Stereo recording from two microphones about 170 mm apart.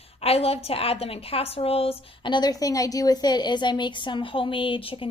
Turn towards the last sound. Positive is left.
turn(degrees=30)  # may be behind; listen again after turning